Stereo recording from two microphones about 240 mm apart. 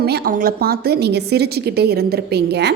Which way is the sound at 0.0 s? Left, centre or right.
Right.